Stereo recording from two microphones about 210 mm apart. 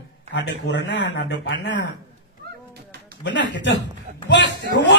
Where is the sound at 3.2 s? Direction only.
60° left (ahead or behind).